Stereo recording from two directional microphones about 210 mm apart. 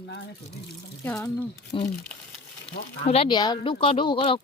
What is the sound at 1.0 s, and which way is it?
Speech, 10° left (ahead or behind).